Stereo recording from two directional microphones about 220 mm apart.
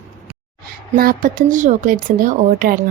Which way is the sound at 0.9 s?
40° right (ahead or behind).